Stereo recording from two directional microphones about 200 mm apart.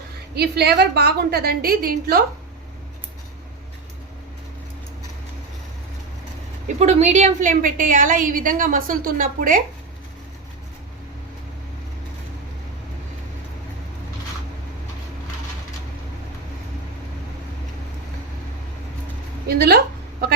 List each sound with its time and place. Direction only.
0.3 s a woman's voice: 55° right (ahead or behind)
6.7 s a woman's voice: 35° right (ahead or behind)
19.5 s a sound: 50° right (ahead or behind)